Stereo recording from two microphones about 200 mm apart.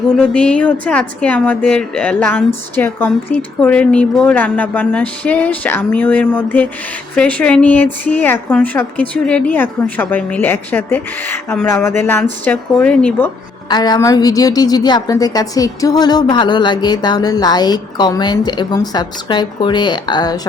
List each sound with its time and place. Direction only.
0.2 s speech: 5° left (ahead or behind)
13.7 s a woman's voice: 20° left (ahead or behind)